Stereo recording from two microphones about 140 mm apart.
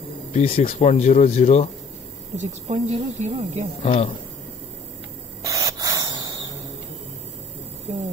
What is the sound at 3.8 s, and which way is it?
Speech, 55° left (ahead or behind).